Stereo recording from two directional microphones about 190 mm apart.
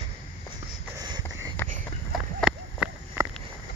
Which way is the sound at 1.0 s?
20° right (ahead or behind).